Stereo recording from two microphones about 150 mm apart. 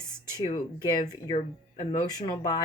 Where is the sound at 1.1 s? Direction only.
40° left (ahead or behind).